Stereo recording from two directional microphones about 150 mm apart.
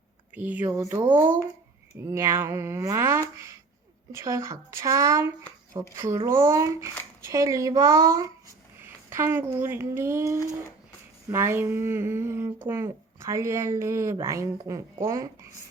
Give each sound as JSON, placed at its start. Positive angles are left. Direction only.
{"t": 0.3, "sound": "a woman's voice", "side_deg": -10}
{"t": 5.7, "sound": "a woman's voice", "side_deg": -30}
{"t": 6.2, "sound": "a woman's voice", "side_deg": -20}